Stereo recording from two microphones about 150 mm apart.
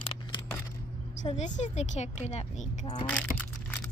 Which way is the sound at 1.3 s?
50° left (ahead or behind).